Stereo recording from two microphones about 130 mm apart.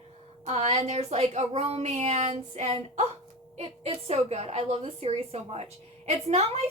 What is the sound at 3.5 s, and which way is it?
A woman's voice, 55° right (ahead or behind).